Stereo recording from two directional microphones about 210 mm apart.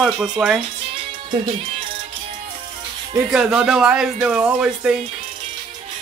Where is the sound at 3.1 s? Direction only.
5° right (ahead or behind).